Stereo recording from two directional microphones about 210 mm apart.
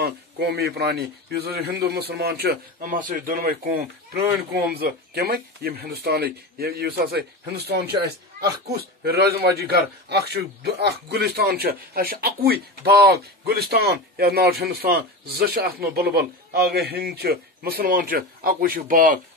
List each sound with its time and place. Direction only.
0.0 s speech: 50° right (ahead or behind)
4.7 s speech: 45° right (ahead or behind)